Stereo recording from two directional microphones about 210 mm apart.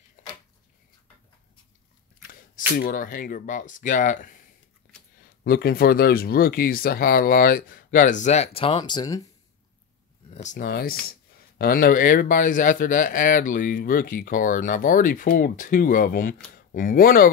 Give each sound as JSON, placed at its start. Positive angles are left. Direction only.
{"t": 2.7, "sound": "speech", "side_deg": 45}
{"t": 5.4, "sound": "speech", "side_deg": 45}
{"t": 10.3, "sound": "speech", "side_deg": 35}